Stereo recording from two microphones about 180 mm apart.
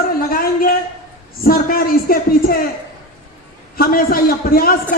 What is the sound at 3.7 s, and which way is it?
Speech, 55° left (ahead or behind).